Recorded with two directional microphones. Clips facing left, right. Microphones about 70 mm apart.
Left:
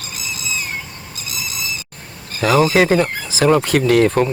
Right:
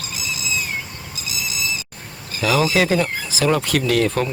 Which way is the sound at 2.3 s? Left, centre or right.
Left.